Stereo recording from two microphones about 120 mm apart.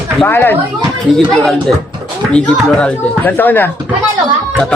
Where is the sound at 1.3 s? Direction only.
5° left (ahead or behind).